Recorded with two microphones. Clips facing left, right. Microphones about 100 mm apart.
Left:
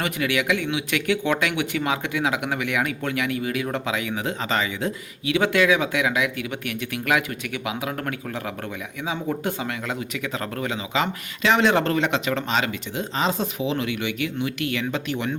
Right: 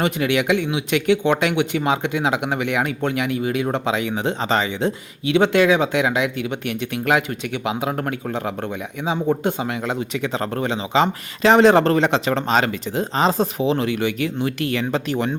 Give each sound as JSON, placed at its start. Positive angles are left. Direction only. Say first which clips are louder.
{"t": 0.0, "sound": "speech", "louder": "right 5 dB", "side_deg": -25}